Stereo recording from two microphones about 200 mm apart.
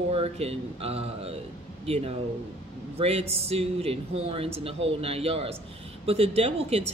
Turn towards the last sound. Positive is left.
turn(degrees=-30)  # may be behind; listen again after turning